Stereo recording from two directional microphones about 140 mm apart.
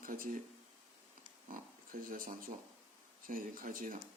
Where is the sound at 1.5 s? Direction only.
75° right (ahead or behind).